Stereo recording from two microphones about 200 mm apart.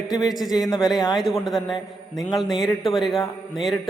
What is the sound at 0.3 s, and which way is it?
Speech, centre (ahead or behind).